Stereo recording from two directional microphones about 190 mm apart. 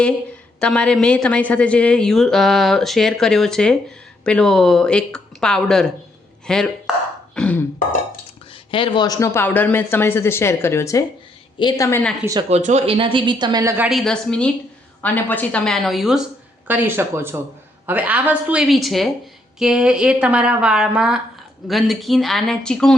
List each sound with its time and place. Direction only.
0.6 s a woman's voice: 5° left (ahead or behind)
7.3 s burping: 5° left (ahead or behind)
8.7 s speech: 25° left (ahead or behind)
12.2 s speech: 20° right (ahead or behind)
12.5 s a woman's voice: 35° right (ahead or behind); by 23.0 s 5° left (ahead or behind)